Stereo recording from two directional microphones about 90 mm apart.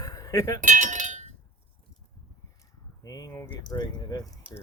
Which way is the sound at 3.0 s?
45° left (ahead or behind).